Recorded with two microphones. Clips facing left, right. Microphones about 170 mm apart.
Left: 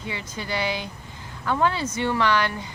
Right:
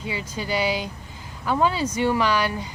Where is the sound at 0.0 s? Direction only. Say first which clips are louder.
Right 3 dB; 10° right (ahead or behind).